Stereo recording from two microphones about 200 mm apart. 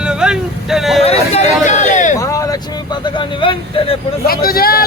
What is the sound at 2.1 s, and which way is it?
Vehicle, 15° left (ahead or behind).